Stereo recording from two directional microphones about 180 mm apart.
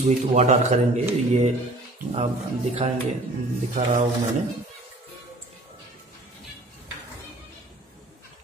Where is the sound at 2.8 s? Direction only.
30° right (ahead or behind).